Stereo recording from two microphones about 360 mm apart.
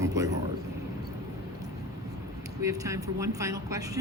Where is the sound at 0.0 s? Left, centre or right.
Centre.